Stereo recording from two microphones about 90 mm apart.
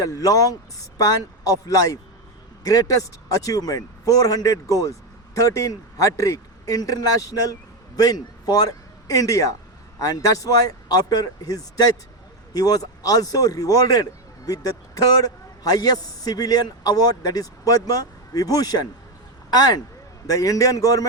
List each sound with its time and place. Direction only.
0.0 s a man's voice: 40° left (ahead or behind)